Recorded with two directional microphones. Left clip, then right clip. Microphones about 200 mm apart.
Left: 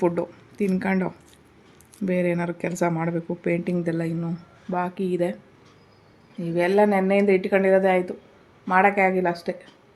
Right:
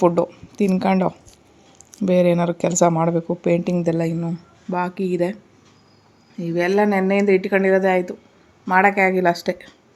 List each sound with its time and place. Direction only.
0.0 s a woman's voice: 25° right (ahead or behind)